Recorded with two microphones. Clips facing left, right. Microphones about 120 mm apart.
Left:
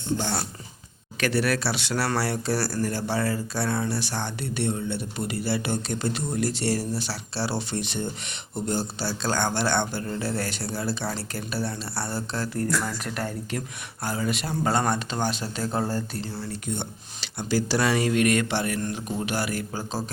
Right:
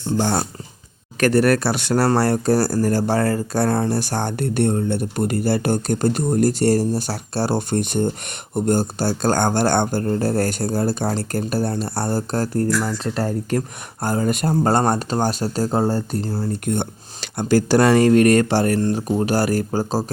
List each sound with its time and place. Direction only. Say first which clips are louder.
0.2 s speech: right 8 dB; 50° right (ahead or behind)
12.8 s speech: right 7 dB; 25° right (ahead or behind)
13.5 s speech: right 9 dB; 45° right (ahead or behind)
16.3 s speech: right 11 dB; 50° right (ahead or behind)